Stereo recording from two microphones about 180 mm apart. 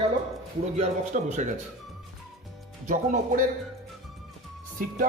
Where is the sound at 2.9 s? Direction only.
45° right (ahead or behind).